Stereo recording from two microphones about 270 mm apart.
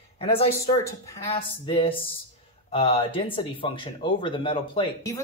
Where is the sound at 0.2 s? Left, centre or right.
Left.